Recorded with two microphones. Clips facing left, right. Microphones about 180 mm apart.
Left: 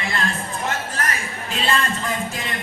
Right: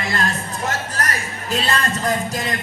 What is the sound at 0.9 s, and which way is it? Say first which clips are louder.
Music: right 1 dB; 40° right (ahead or behind).